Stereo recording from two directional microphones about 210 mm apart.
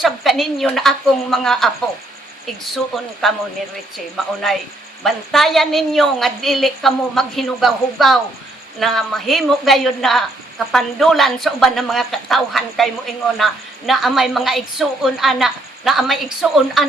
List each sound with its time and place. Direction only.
0.0 s speech: centre (ahead or behind)
2.7 s speech: centre (ahead or behind)
5.0 s speech: centre (ahead or behind)